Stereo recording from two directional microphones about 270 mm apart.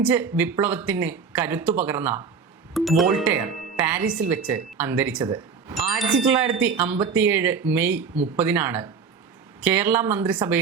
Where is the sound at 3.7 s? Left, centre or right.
Centre.